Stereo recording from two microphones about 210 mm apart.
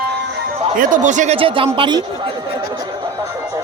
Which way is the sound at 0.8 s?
40° right (ahead or behind).